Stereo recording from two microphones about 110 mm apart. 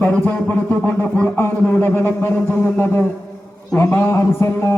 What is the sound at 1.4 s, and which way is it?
Speech, 20° left (ahead or behind).